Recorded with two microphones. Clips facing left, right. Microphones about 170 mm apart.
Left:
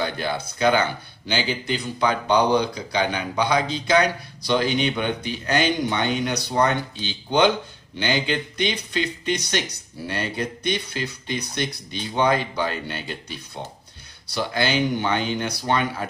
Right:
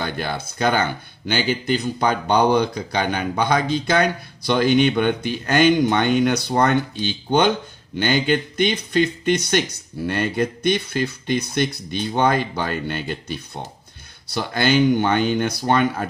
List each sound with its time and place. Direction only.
0.0 s speech: 50° right (ahead or behind)